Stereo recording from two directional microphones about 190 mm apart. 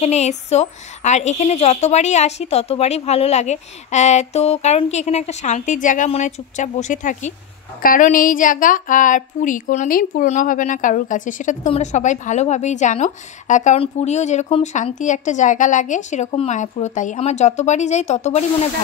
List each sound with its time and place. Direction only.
0.0 s speech: 35° left (ahead or behind)